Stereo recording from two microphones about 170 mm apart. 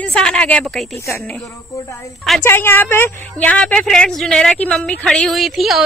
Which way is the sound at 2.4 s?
15° left (ahead or behind).